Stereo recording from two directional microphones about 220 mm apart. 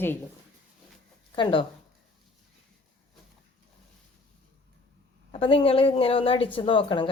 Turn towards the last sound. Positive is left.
turn(degrees=20)  # may be behind; listen again after turning